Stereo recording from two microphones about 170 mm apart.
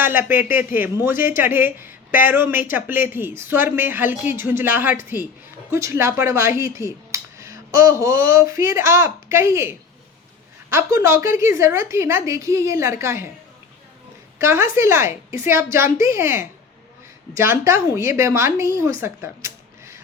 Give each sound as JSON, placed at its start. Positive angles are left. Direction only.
{"t": 0.0, "sound": "speech", "side_deg": -10}
{"t": 14.3, "sound": "speech", "side_deg": -15}
{"t": 19.0, "sound": "a sound", "side_deg": -15}